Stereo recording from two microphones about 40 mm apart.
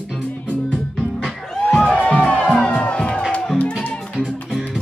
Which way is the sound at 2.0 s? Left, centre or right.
Left.